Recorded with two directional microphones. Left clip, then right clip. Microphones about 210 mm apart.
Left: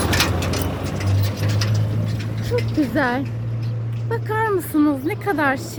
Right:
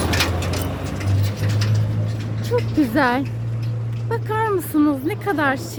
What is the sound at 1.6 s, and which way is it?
Bird, 20° left (ahead or behind).